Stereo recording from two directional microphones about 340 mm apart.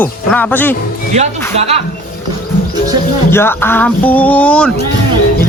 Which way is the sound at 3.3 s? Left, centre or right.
Centre.